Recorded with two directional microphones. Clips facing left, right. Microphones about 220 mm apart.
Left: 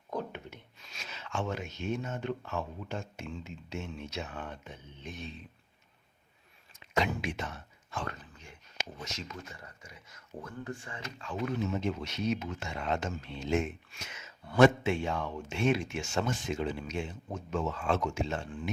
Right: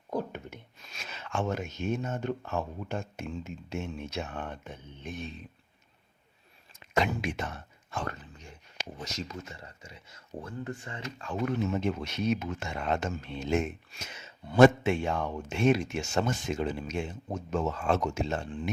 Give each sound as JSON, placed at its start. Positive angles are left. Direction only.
{"t": 0.1, "sound": "speech", "side_deg": -45}
{"t": 6.7, "sound": "speech", "side_deg": -50}
{"t": 9.1, "sound": "speech", "side_deg": -25}
{"t": 11.2, "sound": "speech", "side_deg": -50}
{"t": 14.6, "sound": "speech", "side_deg": -50}